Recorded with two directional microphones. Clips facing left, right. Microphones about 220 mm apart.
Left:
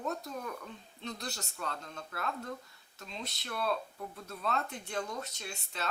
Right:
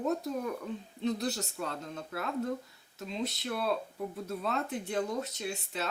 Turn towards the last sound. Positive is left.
turn(degrees=-5)  # may be behind; listen again after turning